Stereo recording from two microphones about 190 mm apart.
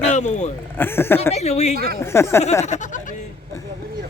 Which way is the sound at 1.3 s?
35° left (ahead or behind).